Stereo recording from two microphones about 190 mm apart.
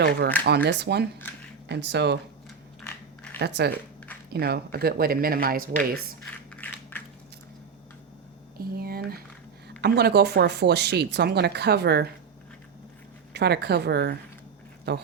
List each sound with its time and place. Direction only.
0.4 s speech: 65° right (ahead or behind)
3.3 s speech: 60° right (ahead or behind)
6.2 s a sound: 5° left (ahead or behind)
8.5 s a sound: 55° right (ahead or behind)
9.6 s speech: 60° right (ahead or behind)
13.3 s speech: 60° right (ahead or behind)